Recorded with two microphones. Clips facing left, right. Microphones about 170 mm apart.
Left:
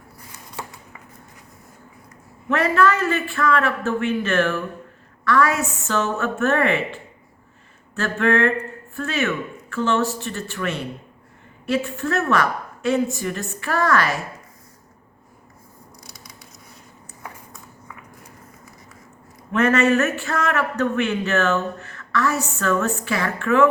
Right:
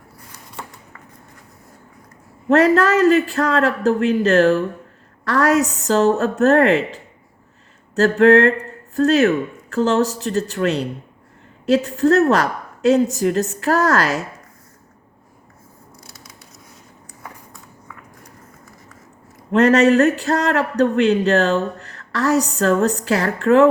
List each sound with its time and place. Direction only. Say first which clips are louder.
2.5 s speech: right 5 dB; 40° right (ahead or behind)
16.0 s scissors: right 1 dB; 5° right (ahead or behind)
17.2 s a sound: even; 5° left (ahead or behind)
19.5 s speech: right 5 dB; 35° right (ahead or behind)